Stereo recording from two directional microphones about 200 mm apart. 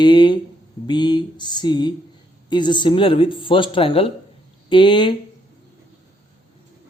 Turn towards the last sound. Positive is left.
turn(degrees=25)  # may be behind; listen again after turning